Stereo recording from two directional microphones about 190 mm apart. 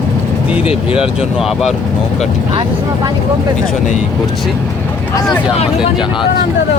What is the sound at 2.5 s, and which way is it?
Speech, 25° right (ahead or behind).